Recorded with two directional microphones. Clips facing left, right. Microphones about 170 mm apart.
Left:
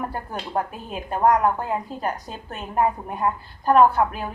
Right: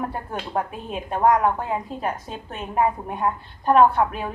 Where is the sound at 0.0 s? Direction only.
Centre (ahead or behind).